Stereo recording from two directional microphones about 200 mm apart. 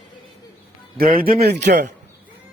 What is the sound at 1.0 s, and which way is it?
Speech, 45° right (ahead or behind).